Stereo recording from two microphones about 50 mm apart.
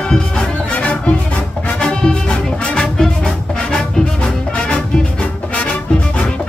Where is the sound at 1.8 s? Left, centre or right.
Centre.